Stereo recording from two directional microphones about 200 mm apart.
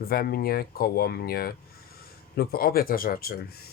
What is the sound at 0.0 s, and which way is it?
Speech, 50° left (ahead or behind).